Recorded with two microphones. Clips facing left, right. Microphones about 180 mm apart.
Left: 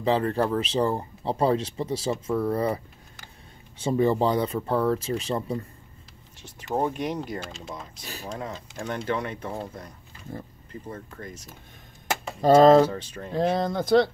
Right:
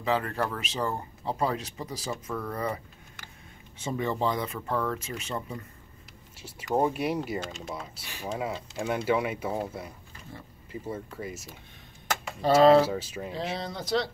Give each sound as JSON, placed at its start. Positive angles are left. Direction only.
{"t": 0.0, "sound": "speech", "side_deg": 30}
{"t": 6.4, "sound": "speech", "side_deg": -10}
{"t": 10.3, "sound": "speech", "side_deg": 45}
{"t": 10.7, "sound": "speech", "side_deg": -10}
{"t": 12.4, "sound": "speech", "side_deg": 45}
{"t": 12.8, "sound": "speech", "side_deg": -10}
{"t": 13.3, "sound": "speech", "side_deg": 50}